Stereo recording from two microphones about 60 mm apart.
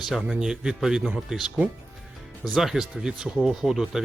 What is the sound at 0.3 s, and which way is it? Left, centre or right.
A man's voice, centre.